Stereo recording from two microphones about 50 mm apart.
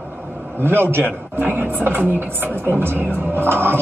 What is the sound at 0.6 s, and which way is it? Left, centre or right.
A man's voice, right.